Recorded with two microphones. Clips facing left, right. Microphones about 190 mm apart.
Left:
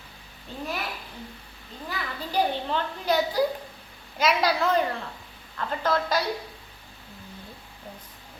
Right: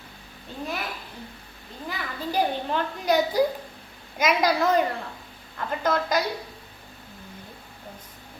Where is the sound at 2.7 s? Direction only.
10° right (ahead or behind).